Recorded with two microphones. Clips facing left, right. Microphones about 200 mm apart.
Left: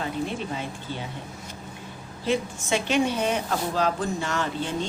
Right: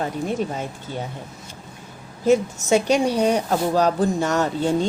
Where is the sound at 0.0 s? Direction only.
45° right (ahead or behind).